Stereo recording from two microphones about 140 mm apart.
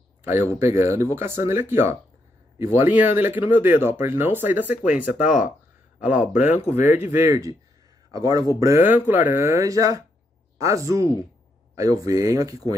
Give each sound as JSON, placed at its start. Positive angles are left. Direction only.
{"t": 0.2, "sound": "speech", "side_deg": -15}
{"t": 6.6, "sound": "speech", "side_deg": 50}
{"t": 6.9, "sound": "speech", "side_deg": -15}